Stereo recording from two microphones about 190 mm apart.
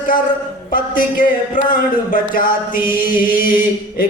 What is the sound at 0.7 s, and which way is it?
Chant, 45° left (ahead or behind).